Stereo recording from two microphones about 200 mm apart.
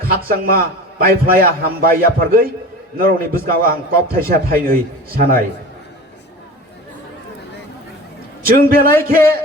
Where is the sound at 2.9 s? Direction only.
45° right (ahead or behind).